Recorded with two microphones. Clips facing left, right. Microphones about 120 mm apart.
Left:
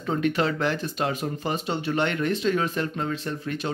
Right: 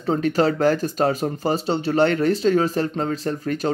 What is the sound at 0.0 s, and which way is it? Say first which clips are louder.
Speech: right 5 dB; 35° right (ahead or behind).